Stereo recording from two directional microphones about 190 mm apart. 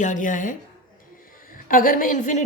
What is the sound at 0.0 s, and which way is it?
A woman's voice, 40° left (ahead or behind).